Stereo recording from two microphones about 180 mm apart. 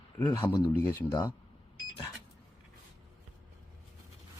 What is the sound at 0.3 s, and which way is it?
Speech, 25° left (ahead or behind).